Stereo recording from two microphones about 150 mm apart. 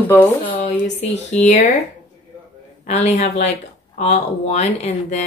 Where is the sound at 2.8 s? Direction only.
50° left (ahead or behind).